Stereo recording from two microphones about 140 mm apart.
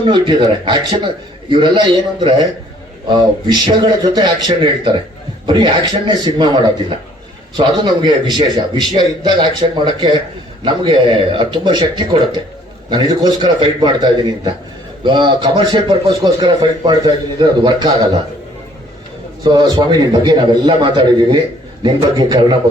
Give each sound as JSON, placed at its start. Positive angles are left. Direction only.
{"t": 0.0, "sound": "a man's voice", "side_deg": -35}
{"t": 19.5, "sound": "a man's voice", "side_deg": -30}